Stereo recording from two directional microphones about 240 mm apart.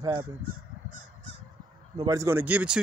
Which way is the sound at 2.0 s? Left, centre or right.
Centre.